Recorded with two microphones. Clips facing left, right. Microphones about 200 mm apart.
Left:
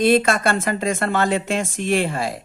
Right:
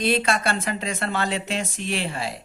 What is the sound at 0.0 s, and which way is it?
Speech, 50° left (ahead or behind).